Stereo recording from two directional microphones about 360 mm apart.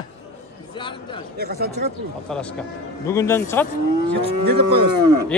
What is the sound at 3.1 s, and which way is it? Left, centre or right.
Speech, centre.